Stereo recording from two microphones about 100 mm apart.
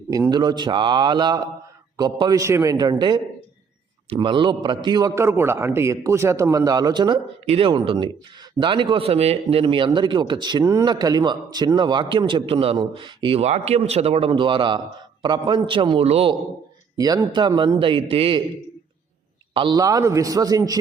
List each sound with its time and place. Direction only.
0.1 s a man's voice: 40° right (ahead or behind)
2.4 s a man's voice: 30° right (ahead or behind)
2.7 s a man's voice: 45° right (ahead or behind)
4.1 s a man's voice: 55° right (ahead or behind)
5.1 s a man's voice: 25° right (ahead or behind); by 7.2 s 45° right (ahead or behind)
7.4 s speech: 90° right
7.9 s a man's voice: 55° right (ahead or behind)
10.6 s a man's voice: 35° right (ahead or behind); by 16.0 s 55° right (ahead or behind)
16.0 s a man's voice: 90° right
17.0 s a man's voice: 45° right (ahead or behind); by 18.3 s 65° right (ahead or behind)
19.5 s a man's voice: 50° right (ahead or behind)
19.8 s a man's voice: 35° right (ahead or behind)